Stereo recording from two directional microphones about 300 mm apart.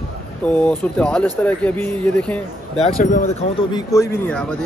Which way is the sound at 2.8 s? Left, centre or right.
Left.